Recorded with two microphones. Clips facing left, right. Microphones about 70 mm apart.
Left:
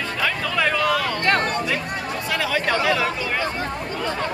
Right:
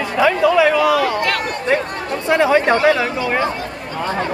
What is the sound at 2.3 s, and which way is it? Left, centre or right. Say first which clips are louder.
Speech: right 10 dB; right.